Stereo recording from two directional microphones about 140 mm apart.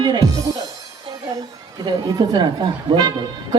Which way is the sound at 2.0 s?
30° right (ahead or behind).